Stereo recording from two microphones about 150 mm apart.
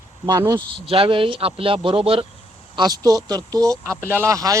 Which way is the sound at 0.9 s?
35° right (ahead or behind).